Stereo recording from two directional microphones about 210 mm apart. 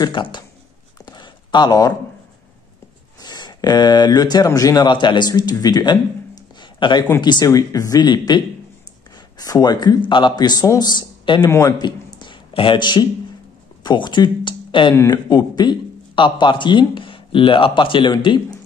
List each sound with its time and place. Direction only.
0.0 s speech: 20° left (ahead or behind)
0.9 s a sound: 20° left (ahead or behind)
3.2 s a man's voice: 20° left (ahead or behind)